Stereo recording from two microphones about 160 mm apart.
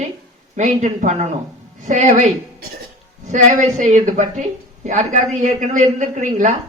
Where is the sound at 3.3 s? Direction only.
50° right (ahead or behind).